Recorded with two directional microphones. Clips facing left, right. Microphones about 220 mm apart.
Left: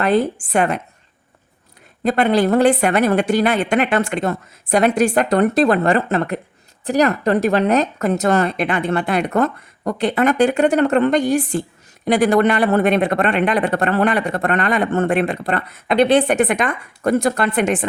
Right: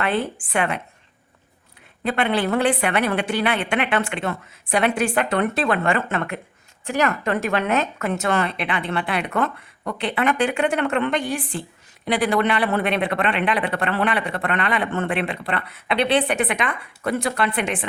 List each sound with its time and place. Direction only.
0.0 s speech: 40° left (ahead or behind)
2.0 s speech: 40° left (ahead or behind)